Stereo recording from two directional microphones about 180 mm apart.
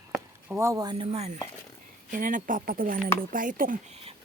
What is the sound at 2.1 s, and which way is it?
Speech, 45° right (ahead or behind).